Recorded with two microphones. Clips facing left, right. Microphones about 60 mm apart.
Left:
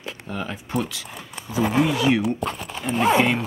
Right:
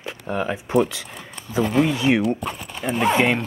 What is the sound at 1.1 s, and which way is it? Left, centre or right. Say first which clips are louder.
Speech: right 3 dB; centre.